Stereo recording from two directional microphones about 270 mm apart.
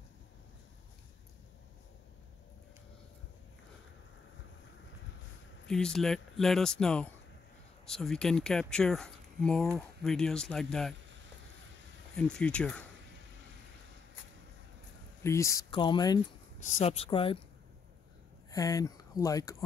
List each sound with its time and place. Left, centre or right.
5.7 s speech: centre
12.2 s speech: centre
15.2 s speech: centre
18.5 s speech: centre